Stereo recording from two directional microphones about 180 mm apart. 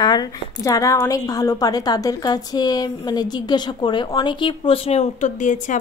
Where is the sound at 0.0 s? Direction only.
20° left (ahead or behind).